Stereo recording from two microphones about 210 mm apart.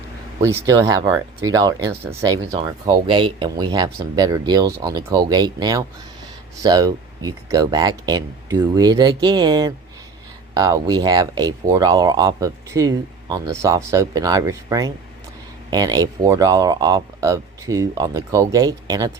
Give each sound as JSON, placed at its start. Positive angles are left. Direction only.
{"t": 0.4, "sound": "speech", "side_deg": -15}